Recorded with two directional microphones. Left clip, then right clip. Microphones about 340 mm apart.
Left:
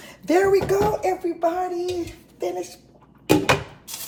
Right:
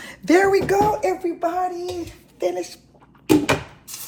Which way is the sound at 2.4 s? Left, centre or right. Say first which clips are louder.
Right 4 dB; right.